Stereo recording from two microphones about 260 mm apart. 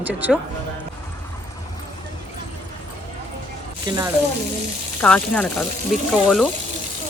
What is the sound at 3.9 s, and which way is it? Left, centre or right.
Speech, centre.